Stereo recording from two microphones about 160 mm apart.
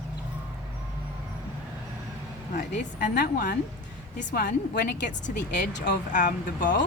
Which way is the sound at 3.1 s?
75° left (ahead or behind).